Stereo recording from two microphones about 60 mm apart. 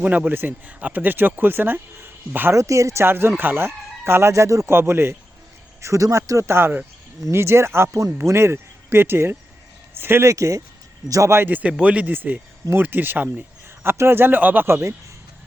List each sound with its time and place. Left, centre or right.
0.0 s speech: right
2.0 s a sound: right
2.5 s speech: right
3.0 s chicken: right
4.7 s speech: right
5.8 s speech: right
7.3 s chicken: right
8.2 s speech: right
10.2 s speech: right
11.3 s a man's voice: right
14.7 s chicken: right